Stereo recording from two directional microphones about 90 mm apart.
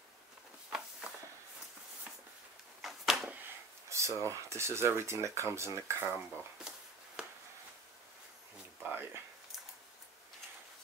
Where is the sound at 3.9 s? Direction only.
35° right (ahead or behind).